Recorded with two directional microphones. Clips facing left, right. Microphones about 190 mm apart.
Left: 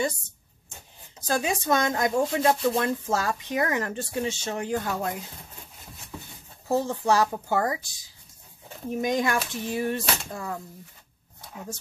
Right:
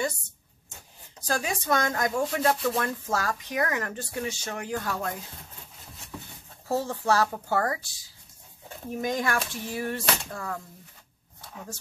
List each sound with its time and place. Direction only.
1.2 s speech: 20° left (ahead or behind)
6.7 s speech: 15° left (ahead or behind)
9.0 s speech: 20° left (ahead or behind)